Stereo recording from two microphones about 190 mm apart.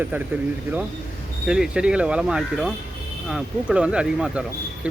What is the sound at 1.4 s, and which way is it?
Speech, 5° right (ahead or behind).